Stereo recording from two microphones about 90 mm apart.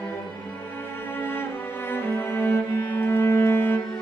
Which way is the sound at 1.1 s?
25° left (ahead or behind).